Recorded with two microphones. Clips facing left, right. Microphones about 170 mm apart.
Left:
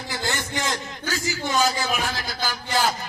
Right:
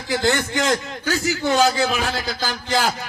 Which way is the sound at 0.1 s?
65° right (ahead or behind).